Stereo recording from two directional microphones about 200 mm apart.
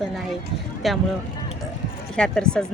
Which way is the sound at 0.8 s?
Centre (ahead or behind).